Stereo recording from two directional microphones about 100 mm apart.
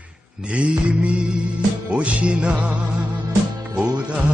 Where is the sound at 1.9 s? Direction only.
10° right (ahead or behind).